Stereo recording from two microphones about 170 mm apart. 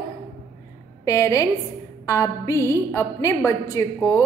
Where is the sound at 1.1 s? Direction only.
20° left (ahead or behind).